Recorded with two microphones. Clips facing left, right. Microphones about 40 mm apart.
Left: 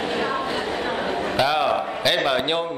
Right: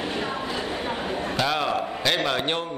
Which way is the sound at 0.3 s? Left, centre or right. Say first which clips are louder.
Left 4 dB; left.